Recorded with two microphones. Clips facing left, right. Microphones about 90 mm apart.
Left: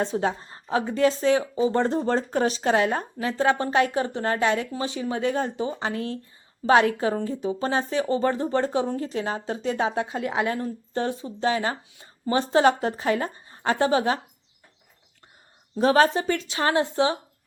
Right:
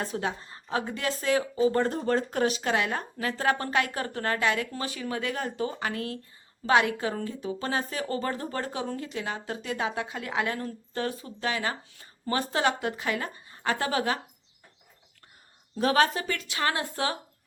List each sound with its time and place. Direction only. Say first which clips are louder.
0.0 s speech: left 6 dB; 30° left (ahead or behind)
15.8 s speech: left 5 dB; 35° left (ahead or behind)